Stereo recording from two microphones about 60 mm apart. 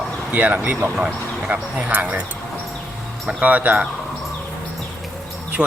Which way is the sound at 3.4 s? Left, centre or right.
Right.